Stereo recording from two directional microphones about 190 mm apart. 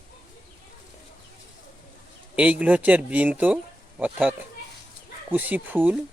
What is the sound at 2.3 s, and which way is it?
Speech, 5° right (ahead or behind).